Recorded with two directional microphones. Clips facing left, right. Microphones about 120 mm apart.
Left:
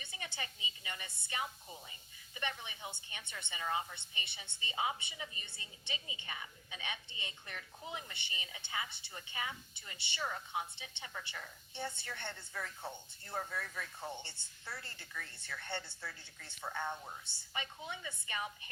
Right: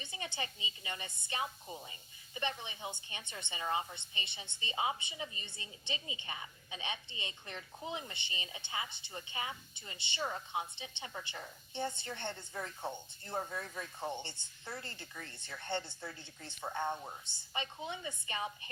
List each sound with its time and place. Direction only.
0.0 s a sound: 20° right (ahead or behind)
0.3 s a woman's voice: 25° right (ahead or behind)
14.9 s a woman's voice: 30° right (ahead or behind)